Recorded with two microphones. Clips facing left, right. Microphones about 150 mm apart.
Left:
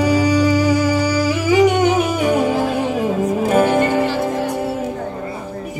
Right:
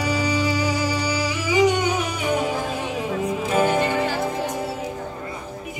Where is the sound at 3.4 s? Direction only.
50° left (ahead or behind).